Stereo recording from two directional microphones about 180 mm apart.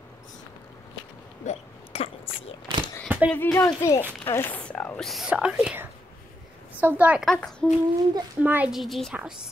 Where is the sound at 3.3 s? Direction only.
10° left (ahead or behind).